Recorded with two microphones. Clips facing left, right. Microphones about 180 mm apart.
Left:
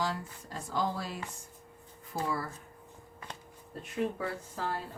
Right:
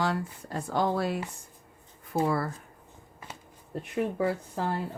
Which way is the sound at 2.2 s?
65° right (ahead or behind).